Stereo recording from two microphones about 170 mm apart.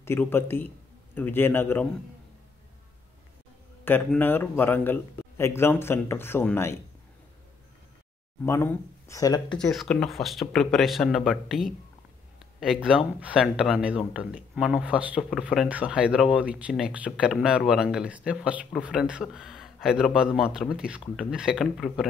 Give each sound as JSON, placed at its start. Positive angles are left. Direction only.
{"t": 0.0, "sound": "a man's voice", "side_deg": 15}
{"t": 3.8, "sound": "a man's voice", "side_deg": 10}
{"t": 8.4, "sound": "a man's voice", "side_deg": 15}
{"t": 9.6, "sound": "speech", "side_deg": 0}